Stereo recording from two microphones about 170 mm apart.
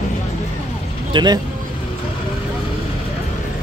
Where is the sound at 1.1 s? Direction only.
25° right (ahead or behind).